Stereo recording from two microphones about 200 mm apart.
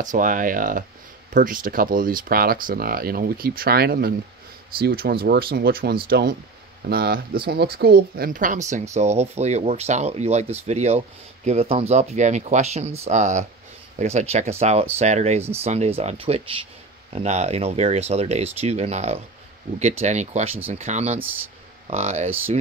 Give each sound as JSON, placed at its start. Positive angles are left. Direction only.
{"t": 0.0, "sound": "speech", "side_deg": -40}